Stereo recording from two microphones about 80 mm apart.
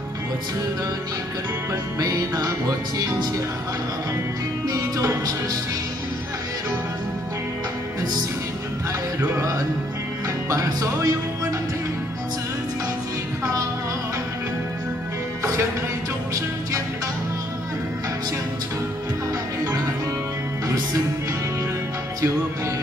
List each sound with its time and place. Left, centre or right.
2.0 s music: right
4.6 s music: right
10.5 s music: right
20.6 s music: right